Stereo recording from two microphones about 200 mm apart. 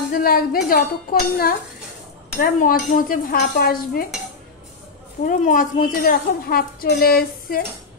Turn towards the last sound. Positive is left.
turn(degrees=50)  # may be behind; listen again after turning